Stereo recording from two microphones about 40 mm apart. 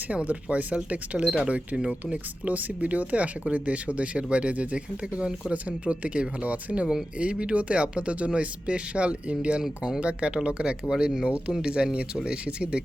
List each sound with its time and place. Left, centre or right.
0.1 s speech: right
10.8 s speech: centre